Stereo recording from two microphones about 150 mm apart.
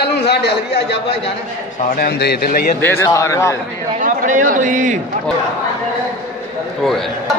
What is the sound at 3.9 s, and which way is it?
A man's voice, 60° right (ahead or behind).